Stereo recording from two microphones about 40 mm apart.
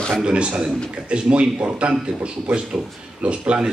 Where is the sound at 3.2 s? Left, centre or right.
Right.